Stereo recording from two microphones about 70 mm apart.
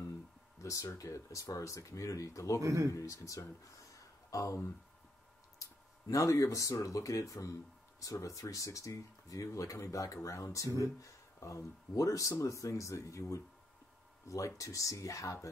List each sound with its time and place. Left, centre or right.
0.6 s a sound: left
0.9 s speech: left
2.6 s speech: right
2.9 s speech: left
5.6 s speech: left